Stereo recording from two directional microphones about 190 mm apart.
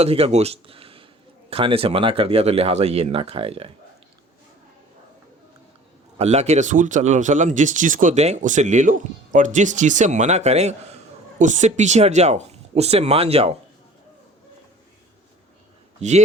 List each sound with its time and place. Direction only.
0.0 s speech: 30° right (ahead or behind)
6.1 s speech: 35° right (ahead or behind)
16.0 s speech: 35° right (ahead or behind)